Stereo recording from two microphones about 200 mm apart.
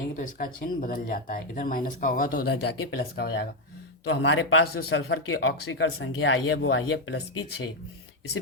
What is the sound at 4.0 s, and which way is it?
Speech, 65° left (ahead or behind).